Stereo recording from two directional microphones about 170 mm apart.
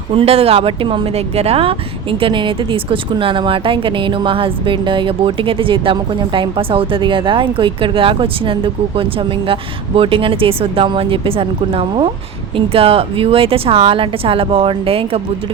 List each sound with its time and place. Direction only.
0.1 s speech: 35° right (ahead or behind)